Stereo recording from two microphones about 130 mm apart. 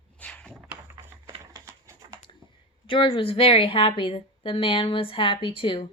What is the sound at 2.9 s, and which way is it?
A woman's voice, 40° left (ahead or behind).